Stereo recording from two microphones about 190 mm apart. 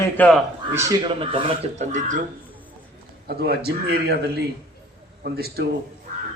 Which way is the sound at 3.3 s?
55° right (ahead or behind).